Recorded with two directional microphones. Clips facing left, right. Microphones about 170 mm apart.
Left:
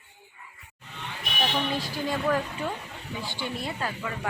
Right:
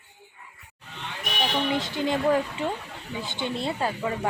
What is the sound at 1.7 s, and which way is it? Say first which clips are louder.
Speech: right 4 dB; 20° right (ahead or behind).